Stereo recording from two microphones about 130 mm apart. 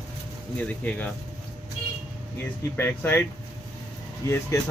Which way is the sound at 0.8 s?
10° left (ahead or behind).